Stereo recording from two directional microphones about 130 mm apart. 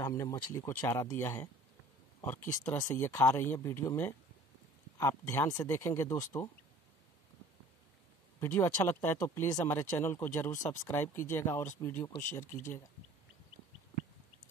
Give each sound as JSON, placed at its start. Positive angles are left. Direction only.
{"t": 0.0, "sound": "speech", "side_deg": 25}
{"t": 8.4, "sound": "speech", "side_deg": 20}
{"t": 12.4, "sound": "speech", "side_deg": 75}